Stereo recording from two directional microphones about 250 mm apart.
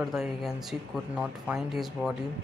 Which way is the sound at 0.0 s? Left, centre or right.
Centre.